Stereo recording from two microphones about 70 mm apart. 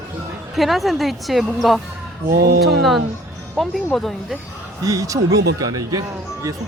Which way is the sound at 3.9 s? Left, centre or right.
Centre.